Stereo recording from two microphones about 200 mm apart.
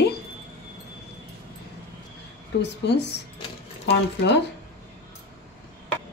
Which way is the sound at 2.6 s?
60° left (ahead or behind).